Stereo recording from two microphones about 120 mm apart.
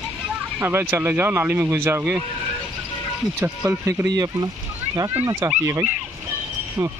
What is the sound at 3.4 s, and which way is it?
Speech, 20° right (ahead or behind).